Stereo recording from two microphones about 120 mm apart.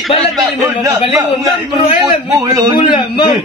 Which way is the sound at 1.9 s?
25° right (ahead or behind).